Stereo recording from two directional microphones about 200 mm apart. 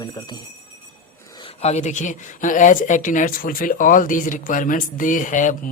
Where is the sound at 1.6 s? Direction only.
35° left (ahead or behind).